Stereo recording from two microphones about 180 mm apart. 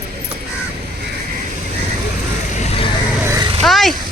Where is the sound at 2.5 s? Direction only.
35° left (ahead or behind).